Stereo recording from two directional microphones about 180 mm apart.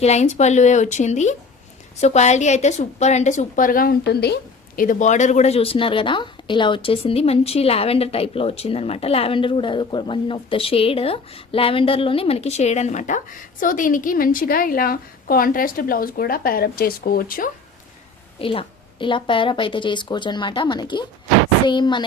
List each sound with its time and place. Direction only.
0.0 s a woman's voice: 40° left (ahead or behind); by 4.4 s 65° left (ahead or behind)
4.8 s a woman's voice: 45° left (ahead or behind)
18.3 s a woman's voice: 30° left (ahead or behind)